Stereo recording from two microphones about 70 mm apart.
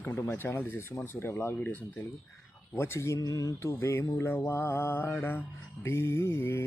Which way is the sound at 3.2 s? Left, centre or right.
Left.